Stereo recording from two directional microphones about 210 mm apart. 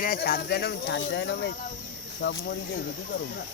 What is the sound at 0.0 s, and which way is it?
Speech, 45° left (ahead or behind).